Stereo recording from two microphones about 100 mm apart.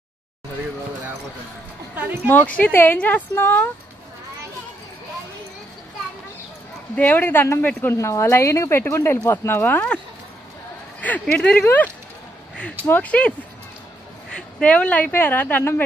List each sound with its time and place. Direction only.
2.2 s speech: 15° left (ahead or behind)
7.0 s speech: 15° left (ahead or behind)
11.0 s speech: 15° left (ahead or behind)
14.3 s speech: 10° left (ahead or behind)